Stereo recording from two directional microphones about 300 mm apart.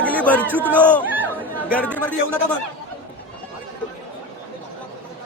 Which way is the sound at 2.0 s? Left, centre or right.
Centre.